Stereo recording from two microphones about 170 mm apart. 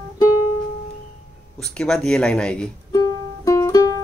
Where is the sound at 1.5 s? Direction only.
5° left (ahead or behind).